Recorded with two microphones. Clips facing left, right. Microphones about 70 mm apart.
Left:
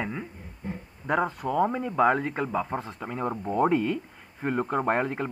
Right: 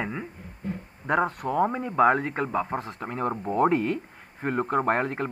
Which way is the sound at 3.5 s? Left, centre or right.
Centre.